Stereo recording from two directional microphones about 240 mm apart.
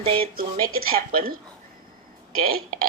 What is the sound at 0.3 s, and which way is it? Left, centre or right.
Speech, right.